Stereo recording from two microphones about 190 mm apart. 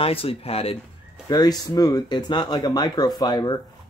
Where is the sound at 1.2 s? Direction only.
20° left (ahead or behind).